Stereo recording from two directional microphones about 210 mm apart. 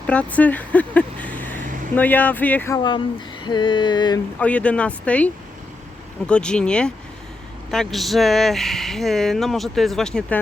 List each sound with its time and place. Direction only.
0.1 s speech: 5° left (ahead or behind)
3.4 s a sound: 20° left (ahead or behind)
4.4 s speech: 5° left (ahead or behind)